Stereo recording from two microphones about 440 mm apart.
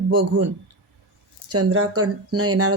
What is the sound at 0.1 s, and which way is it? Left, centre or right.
Speech, right.